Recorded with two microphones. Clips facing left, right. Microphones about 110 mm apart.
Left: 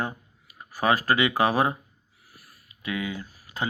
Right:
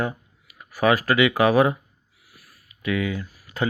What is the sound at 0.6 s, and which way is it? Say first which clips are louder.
Speech: right 4 dB; 25° left (ahead or behind).